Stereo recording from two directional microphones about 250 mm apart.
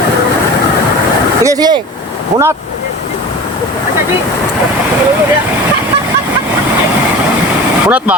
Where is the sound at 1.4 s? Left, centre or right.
Centre.